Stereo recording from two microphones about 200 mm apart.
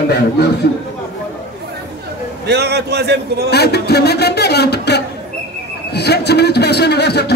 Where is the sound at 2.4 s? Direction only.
55° right (ahead or behind).